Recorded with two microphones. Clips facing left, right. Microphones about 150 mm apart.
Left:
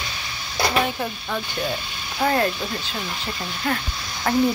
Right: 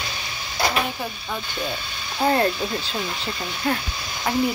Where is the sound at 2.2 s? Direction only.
30° right (ahead or behind).